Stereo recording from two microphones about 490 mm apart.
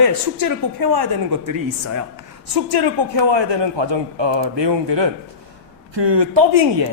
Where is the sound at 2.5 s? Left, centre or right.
Right.